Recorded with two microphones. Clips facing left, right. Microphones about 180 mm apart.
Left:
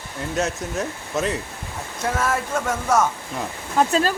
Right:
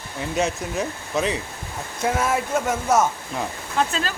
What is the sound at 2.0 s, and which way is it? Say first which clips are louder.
Speech: right 1 dB; 10° right (ahead or behind).